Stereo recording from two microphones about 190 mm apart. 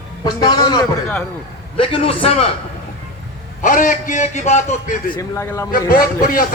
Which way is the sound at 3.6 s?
45° left (ahead or behind).